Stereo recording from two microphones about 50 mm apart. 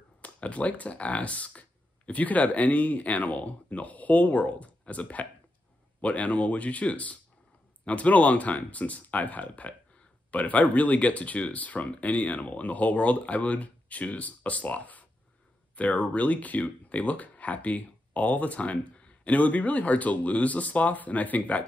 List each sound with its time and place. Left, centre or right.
0.2 s speech: left